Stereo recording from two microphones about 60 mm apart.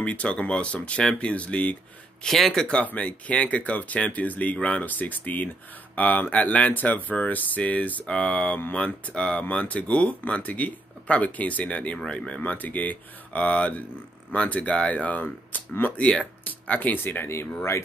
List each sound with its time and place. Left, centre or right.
0.0 s speech: left
2.2 s speech: centre
2.8 s speech: left